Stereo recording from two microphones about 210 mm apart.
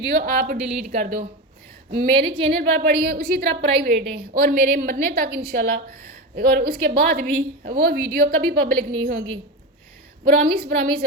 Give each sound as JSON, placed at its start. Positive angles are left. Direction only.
{"t": 0.0, "sound": "a woman's voice", "side_deg": -45}
{"t": 2.1, "sound": "a woman's voice", "side_deg": -25}
{"t": 2.6, "sound": "a woman's voice", "side_deg": -45}
{"t": 10.2, "sound": "a woman's voice", "side_deg": -45}